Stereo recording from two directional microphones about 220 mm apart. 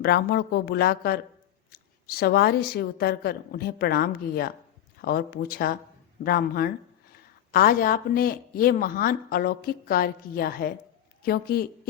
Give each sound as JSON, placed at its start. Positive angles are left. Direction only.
{"t": 0.0, "sound": "a woman's voice", "side_deg": 45}